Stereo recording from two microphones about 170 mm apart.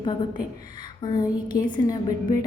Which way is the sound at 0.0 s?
25° left (ahead or behind).